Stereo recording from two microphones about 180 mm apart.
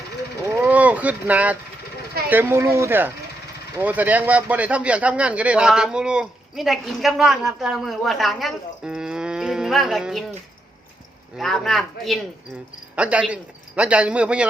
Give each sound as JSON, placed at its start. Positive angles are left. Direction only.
{"t": 0.6, "sound": "a sound", "side_deg": -10}
{"t": 2.3, "sound": "a man's voice", "side_deg": -10}
{"t": 11.3, "sound": "a man's voice", "side_deg": 0}